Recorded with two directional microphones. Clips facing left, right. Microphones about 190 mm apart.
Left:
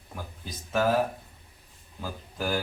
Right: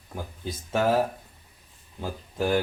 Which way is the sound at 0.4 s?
25° right (ahead or behind).